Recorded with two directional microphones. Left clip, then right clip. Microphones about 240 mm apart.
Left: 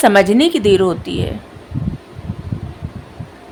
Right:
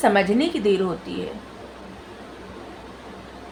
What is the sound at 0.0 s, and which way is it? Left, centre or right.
A woman's voice, left.